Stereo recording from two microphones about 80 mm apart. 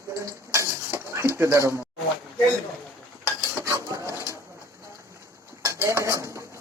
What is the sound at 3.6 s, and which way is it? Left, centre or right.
Dishes, right.